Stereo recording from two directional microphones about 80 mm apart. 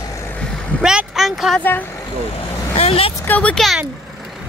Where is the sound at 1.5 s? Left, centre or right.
Left.